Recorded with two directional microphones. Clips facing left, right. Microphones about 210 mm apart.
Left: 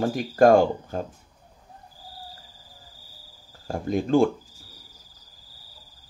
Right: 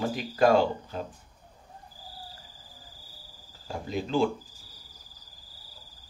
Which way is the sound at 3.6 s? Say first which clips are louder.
Left 8 dB; 50° left (ahead or behind).